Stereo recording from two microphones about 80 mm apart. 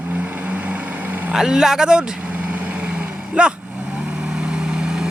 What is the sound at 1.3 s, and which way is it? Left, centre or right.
Speech, centre.